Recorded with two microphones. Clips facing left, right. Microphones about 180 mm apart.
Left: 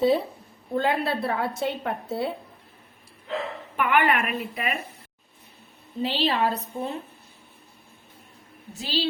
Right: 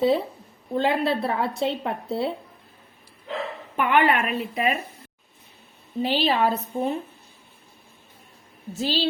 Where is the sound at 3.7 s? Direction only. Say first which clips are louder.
Right 2 dB; 30° right (ahead or behind).